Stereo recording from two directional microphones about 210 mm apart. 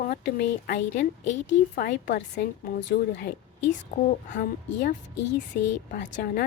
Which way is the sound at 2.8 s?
60° left (ahead or behind).